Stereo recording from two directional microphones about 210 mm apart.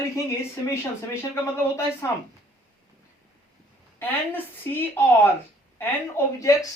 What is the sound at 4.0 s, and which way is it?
Speech, 10° left (ahead or behind).